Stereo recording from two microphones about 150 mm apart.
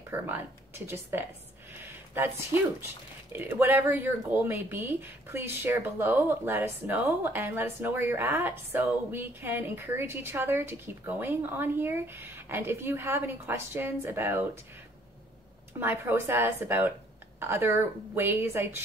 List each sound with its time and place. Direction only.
0.1 s speech: 15° right (ahead or behind)
15.8 s speech: 15° right (ahead or behind)